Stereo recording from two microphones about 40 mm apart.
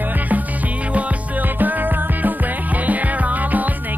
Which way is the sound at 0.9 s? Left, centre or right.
Right.